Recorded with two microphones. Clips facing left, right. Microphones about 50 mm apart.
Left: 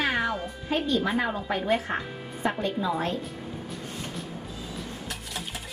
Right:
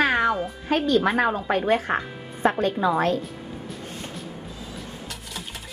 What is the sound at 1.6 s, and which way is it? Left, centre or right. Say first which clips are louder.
Speech: right 3 dB; right.